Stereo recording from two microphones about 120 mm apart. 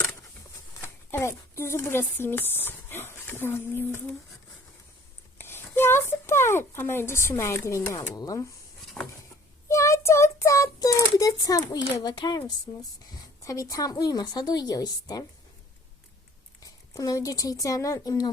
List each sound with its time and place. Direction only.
0.8 s speech: 20° left (ahead or behind)
5.4 s speech: 20° left (ahead or behind)
9.0 s a sound: 15° left (ahead or behind)
9.6 s child singing: 25° left (ahead or behind)
12.7 s a woman's voice: 40° left (ahead or behind)
13.1 s a woman's voice: 30° left (ahead or behind)
16.6 s a woman's voice: 30° left (ahead or behind)